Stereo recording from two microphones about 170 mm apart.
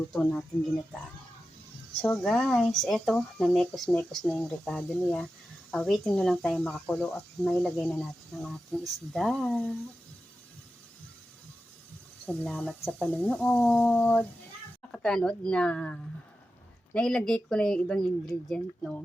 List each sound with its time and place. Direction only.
0.1 s speech: 5° left (ahead or behind)
2.0 s speech: 5° left (ahead or behind)
12.2 s speech: 5° left (ahead or behind)